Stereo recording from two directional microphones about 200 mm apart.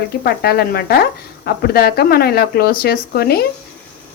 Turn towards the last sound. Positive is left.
turn(degrees=50)  # may be behind; listen again after turning